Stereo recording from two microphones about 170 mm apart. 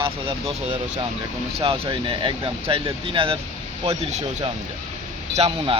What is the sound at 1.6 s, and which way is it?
Speech, 30° right (ahead or behind).